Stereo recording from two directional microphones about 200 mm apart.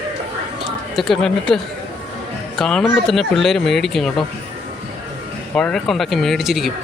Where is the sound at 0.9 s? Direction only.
Centre (ahead or behind).